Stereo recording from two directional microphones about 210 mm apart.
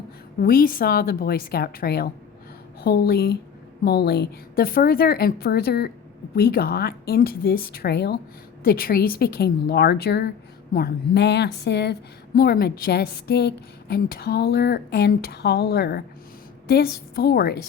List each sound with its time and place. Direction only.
0.3 s a woman's voice: 45° left (ahead or behind)